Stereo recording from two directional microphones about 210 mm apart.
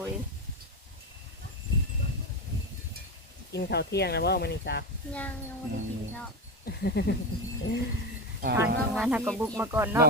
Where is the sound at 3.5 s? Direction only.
50° left (ahead or behind).